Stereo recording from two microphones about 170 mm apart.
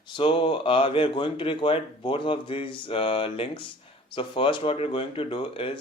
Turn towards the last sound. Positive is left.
turn(degrees=30)  # may be behind; listen again after turning